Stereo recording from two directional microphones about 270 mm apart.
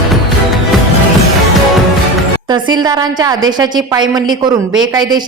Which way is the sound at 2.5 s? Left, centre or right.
Centre.